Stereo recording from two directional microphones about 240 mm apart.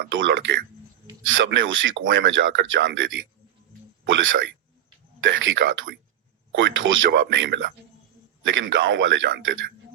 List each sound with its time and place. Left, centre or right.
0.1 s speech: right
4.0 s speech: right